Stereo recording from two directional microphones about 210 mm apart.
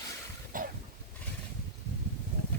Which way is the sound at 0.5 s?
40° right (ahead or behind).